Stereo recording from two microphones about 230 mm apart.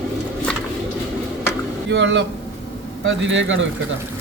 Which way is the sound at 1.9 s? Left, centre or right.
Right.